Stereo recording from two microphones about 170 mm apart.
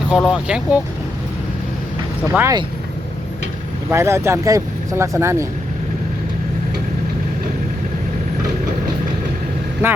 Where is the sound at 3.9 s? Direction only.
15° right (ahead or behind).